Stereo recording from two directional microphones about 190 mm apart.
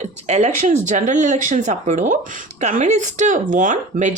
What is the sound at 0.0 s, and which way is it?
Speech, 35° right (ahead or behind).